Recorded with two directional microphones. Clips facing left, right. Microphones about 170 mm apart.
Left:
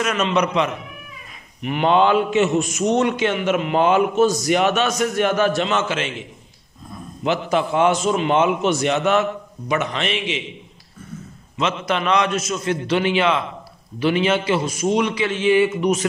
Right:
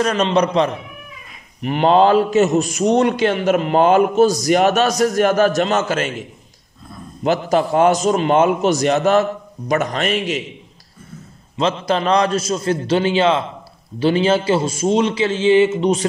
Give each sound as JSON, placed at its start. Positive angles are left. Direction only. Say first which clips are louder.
{"t": 0.0, "sound": "a man's voice", "louder": "right 4 dB", "side_deg": -35}
{"t": 7.2, "sound": "a man's voice", "louder": "right 3 dB", "side_deg": -40}
{"t": 11.5, "sound": "a man's voice", "louder": "right 4 dB", "side_deg": -30}